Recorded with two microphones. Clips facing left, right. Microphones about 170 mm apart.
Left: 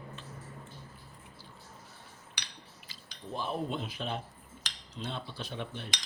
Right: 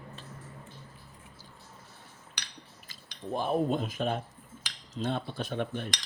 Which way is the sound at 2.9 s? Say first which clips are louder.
Right 6 dB; 50° right (ahead or behind).